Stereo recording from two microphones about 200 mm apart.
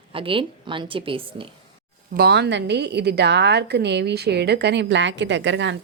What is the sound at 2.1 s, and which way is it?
A woman's voice, 55° right (ahead or behind).